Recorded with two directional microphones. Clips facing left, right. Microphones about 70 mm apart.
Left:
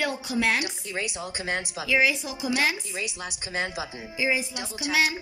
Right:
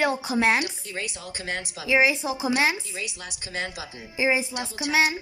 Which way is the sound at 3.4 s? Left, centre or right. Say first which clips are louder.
Left 2 dB; centre.